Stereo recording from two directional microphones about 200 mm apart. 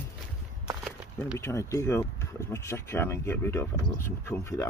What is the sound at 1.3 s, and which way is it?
Speech, 15° left (ahead or behind).